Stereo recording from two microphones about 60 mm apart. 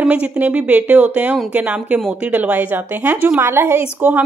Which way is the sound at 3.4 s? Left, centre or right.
Right.